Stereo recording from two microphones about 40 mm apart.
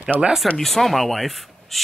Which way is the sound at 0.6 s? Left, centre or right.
Centre.